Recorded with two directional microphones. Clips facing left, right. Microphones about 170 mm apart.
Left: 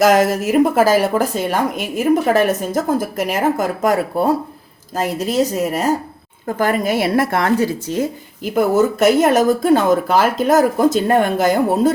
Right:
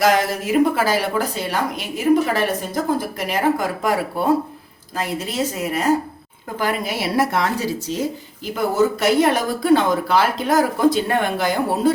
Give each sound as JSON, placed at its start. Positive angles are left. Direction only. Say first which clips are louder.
{"t": 0.0, "sound": "speech", "louder": "left 5 dB", "side_deg": 45}
{"t": 4.9, "sound": "a woman's voice", "louder": "left 6 dB", "side_deg": 40}